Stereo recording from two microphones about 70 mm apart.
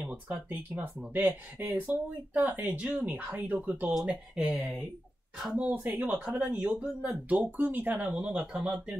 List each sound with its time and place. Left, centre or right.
0.0 s speech: right
4.4 s speech: centre
5.5 s speech: centre
6.8 s speech: centre
7.2 s speech: right